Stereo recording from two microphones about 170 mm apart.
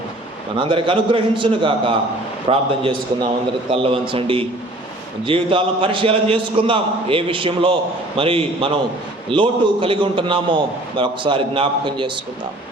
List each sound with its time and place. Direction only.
0.5 s a man's voice: 30° right (ahead or behind)